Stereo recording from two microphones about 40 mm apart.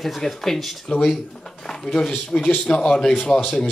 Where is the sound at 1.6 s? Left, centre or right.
Centre.